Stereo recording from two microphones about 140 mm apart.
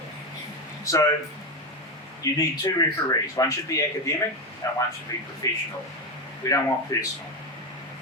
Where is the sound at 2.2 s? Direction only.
25° left (ahead or behind).